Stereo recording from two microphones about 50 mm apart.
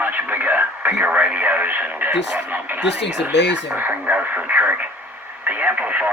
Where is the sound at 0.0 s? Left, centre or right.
Right.